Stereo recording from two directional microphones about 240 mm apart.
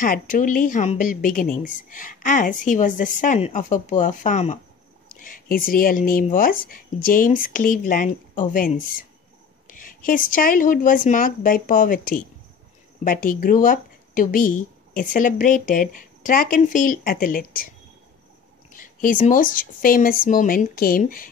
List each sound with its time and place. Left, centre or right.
0.0 s speech: left
18.8 s speech: left